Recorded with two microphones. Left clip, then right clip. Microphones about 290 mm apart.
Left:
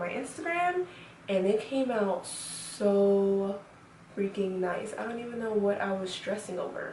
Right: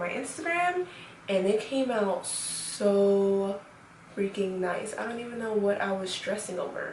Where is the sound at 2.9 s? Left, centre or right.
Left.